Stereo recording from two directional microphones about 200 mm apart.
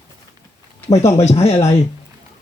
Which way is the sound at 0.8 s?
15° left (ahead or behind).